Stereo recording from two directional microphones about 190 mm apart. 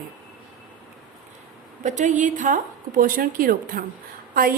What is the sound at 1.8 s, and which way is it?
A woman's voice, 40° right (ahead or behind).